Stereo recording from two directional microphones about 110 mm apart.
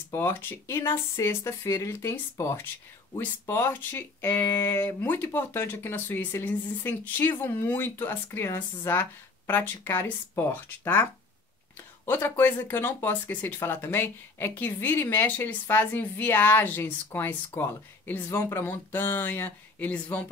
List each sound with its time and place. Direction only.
0.1 s speech: 20° left (ahead or behind)
12.1 s speech: 20° left (ahead or behind)